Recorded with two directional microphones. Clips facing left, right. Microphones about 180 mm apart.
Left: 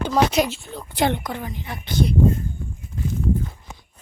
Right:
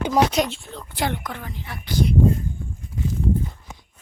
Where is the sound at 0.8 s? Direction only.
20° left (ahead or behind).